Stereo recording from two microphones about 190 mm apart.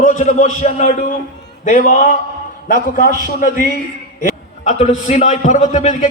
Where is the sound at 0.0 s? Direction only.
40° left (ahead or behind).